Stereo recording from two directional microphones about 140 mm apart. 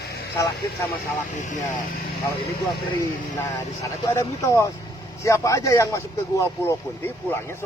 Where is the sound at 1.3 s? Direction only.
65° left (ahead or behind).